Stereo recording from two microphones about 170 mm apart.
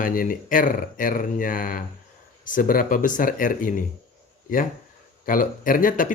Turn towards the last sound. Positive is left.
turn(degrees=55)  # may be behind; listen again after turning